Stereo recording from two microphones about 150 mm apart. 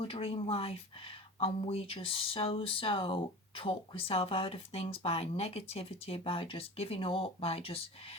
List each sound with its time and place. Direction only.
0.0 s speech: 40° left (ahead or behind)